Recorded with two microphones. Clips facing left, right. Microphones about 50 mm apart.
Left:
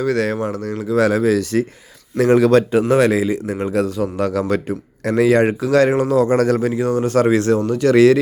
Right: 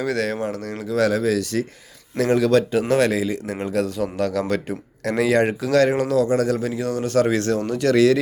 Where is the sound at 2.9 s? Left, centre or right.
Centre.